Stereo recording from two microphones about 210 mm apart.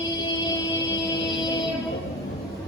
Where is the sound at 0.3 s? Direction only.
20° left (ahead or behind).